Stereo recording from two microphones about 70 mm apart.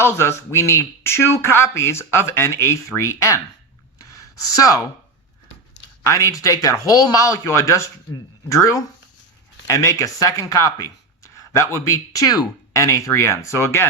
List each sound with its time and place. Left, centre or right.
0.0 s speech: left
4.1 s speech: left
6.0 s speech: left
11.9 s speech: left